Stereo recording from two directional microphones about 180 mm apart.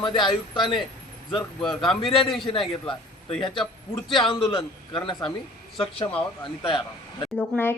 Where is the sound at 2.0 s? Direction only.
30° left (ahead or behind).